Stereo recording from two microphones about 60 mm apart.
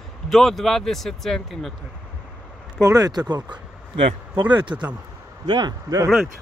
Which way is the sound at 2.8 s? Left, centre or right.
Right.